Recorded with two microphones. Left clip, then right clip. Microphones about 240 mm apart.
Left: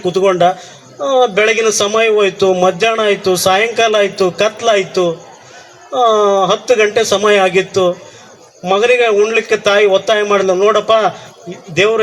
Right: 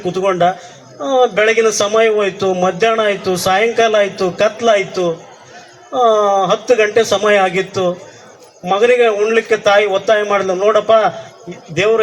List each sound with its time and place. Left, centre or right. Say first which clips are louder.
0.0 s a man's voice: left 3 dB; left